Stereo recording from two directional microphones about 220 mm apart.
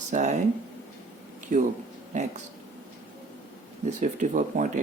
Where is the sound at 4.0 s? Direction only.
35° right (ahead or behind).